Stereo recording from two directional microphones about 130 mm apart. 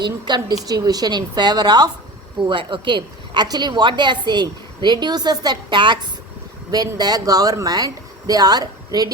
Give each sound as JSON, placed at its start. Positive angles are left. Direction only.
{"t": 0.0, "sound": "a woman's voice", "side_deg": -35}